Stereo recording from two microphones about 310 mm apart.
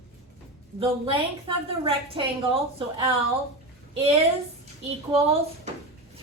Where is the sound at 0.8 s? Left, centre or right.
Centre.